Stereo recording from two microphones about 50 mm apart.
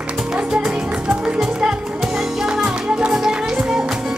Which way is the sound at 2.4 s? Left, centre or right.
Centre.